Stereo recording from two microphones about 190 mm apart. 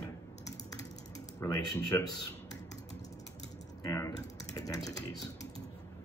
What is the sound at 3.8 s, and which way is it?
Typing, 15° left (ahead or behind).